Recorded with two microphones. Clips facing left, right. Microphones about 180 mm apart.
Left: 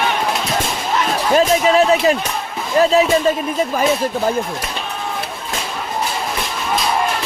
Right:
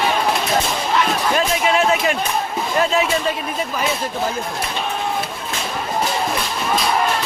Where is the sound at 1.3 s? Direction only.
35° left (ahead or behind).